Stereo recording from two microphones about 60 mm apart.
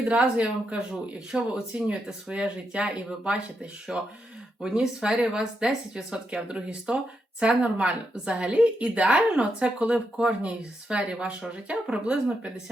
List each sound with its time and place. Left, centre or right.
0.0 s speech: right